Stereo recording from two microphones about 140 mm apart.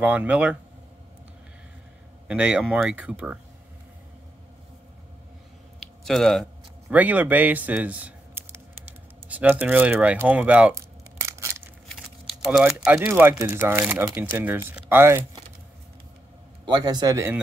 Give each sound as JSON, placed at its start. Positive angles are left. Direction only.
{"t": 0.0, "sound": "speech", "side_deg": -10}
{"t": 2.2, "sound": "speech", "side_deg": -5}
{"t": 5.8, "sound": "a sound", "side_deg": 0}
{"t": 6.9, "sound": "speech", "side_deg": -10}
{"t": 10.7, "sound": "tearing", "side_deg": -20}
{"t": 12.8, "sound": "speech", "side_deg": -5}
{"t": 16.6, "sound": "a man's voice", "side_deg": -30}